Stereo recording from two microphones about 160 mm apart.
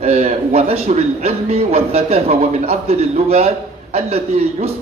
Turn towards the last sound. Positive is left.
turn(degrees=-40)  # may be behind; listen again after turning